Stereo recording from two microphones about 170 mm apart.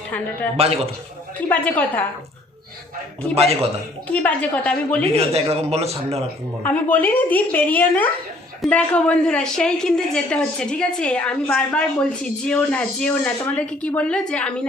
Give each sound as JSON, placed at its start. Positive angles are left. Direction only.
{"t": 0.6, "sound": "a man's voice", "side_deg": -35}
{"t": 1.4, "sound": "speech", "side_deg": 10}
{"t": 3.3, "sound": "a man's voice", "side_deg": -35}
{"t": 4.1, "sound": "speech", "side_deg": 10}
{"t": 5.1, "sound": "a man's voice", "side_deg": -35}
{"t": 6.7, "sound": "a woman's voice", "side_deg": 10}